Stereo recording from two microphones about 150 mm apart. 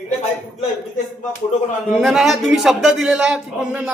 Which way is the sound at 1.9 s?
Centre (ahead or behind).